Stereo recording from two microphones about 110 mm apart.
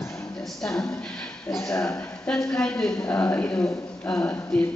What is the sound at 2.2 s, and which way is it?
A woman's voice, 10° left (ahead or behind).